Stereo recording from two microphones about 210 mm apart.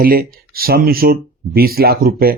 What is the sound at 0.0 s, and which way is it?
Speech, 45° right (ahead or behind).